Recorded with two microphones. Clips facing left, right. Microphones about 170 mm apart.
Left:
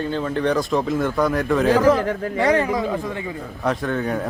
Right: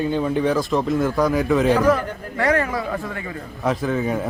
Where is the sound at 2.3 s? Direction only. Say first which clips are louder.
Left 1 dB; 20° left (ahead or behind).